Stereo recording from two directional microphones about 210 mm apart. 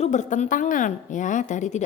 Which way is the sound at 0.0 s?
35° left (ahead or behind).